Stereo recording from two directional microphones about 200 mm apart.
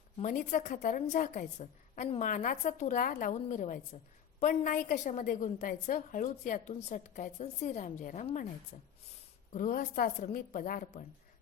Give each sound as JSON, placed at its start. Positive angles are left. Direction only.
{"t": 0.2, "sound": "a woman's voice", "side_deg": 40}